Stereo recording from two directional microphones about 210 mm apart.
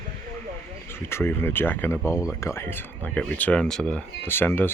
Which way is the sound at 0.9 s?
10° left (ahead or behind).